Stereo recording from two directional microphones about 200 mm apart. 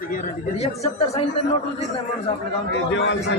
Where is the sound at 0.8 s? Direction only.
30° left (ahead or behind).